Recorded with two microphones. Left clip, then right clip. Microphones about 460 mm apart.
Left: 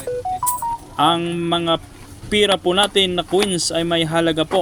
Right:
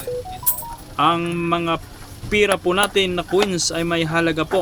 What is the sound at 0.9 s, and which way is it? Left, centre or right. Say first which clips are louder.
Speech: even; right.